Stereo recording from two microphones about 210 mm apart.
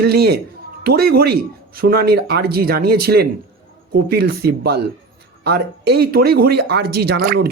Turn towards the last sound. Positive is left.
turn(degrees=-45)  # may be behind; listen again after turning